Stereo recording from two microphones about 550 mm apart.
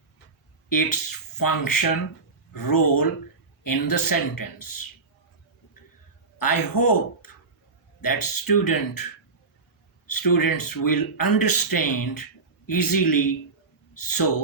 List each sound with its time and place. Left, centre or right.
0.7 s speech: left
6.4 s speech: left
10.1 s speech: left